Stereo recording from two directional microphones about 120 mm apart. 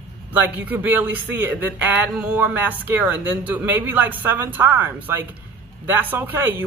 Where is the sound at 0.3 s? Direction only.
15° right (ahead or behind).